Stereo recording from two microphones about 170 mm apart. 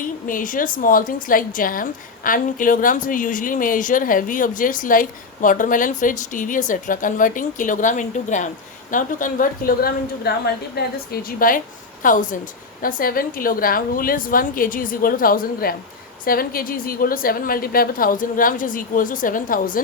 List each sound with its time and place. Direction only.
0.0 s a woman's voice: 50° left (ahead or behind)